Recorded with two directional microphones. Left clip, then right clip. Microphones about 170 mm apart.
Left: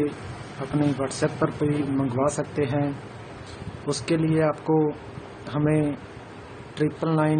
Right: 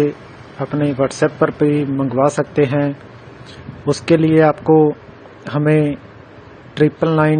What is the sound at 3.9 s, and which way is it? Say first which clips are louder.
Speech: right 11 dB; 35° right (ahead or behind).